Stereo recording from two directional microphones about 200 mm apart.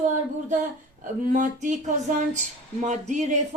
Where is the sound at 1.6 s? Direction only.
40° right (ahead or behind).